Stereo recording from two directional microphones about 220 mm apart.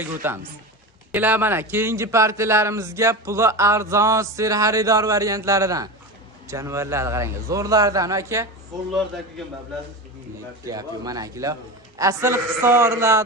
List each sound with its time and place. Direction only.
0.0 s a man's voice: 10° right (ahead or behind)
10.7 s a man's voice: 15° right (ahead or behind)